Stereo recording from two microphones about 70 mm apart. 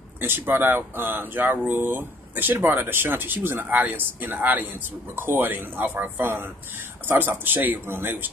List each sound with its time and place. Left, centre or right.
0.2 s speech: right